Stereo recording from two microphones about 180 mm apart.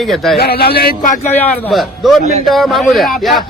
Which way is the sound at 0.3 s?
60° left (ahead or behind).